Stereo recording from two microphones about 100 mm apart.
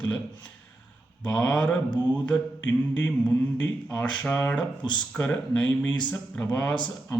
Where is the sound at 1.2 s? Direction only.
5° left (ahead or behind).